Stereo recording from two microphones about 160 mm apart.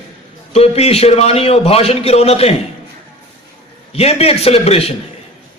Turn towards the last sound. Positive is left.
turn(degrees=40)  # may be behind; listen again after turning